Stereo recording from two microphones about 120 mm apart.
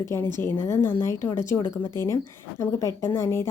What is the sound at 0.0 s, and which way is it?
A woman's voice, 25° left (ahead or behind).